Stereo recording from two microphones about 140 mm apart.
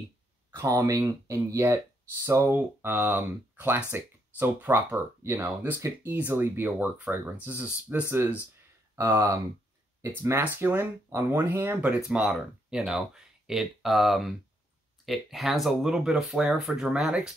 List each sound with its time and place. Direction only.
0.5 s speech: 20° right (ahead or behind); by 17.3 s 5° right (ahead or behind)